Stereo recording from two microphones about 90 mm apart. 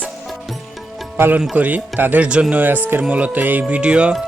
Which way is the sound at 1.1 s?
20° right (ahead or behind).